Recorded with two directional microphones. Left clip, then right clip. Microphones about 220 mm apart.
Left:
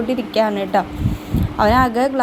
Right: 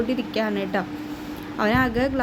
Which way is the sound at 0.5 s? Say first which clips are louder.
Left 7 dB; 5° left (ahead or behind).